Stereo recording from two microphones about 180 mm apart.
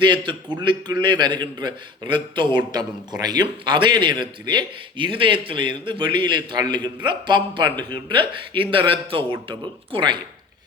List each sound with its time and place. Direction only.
0.0 s a man's voice: 25° right (ahead or behind)